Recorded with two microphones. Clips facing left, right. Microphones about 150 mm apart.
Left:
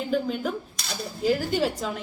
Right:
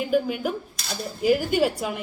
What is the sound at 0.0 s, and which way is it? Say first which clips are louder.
A woman's voice: right 3 dB; 10° right (ahead or behind).